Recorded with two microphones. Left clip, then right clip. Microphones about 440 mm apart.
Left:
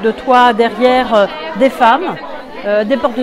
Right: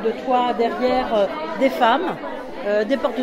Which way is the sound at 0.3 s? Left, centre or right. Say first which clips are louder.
Left 11 dB; left.